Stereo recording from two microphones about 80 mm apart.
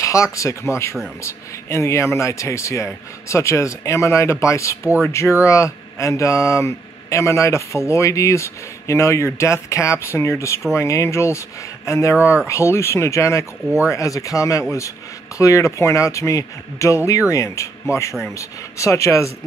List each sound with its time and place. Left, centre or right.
0.0 s speech: left
12.2 s speech: centre
12.4 s speech: left